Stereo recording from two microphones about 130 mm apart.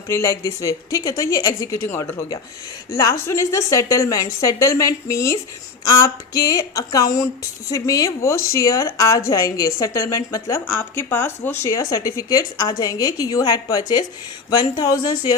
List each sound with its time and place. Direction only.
0.1 s speech: 25° left (ahead or behind)